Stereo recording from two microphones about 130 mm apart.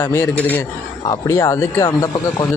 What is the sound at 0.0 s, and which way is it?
Speech, 20° left (ahead or behind).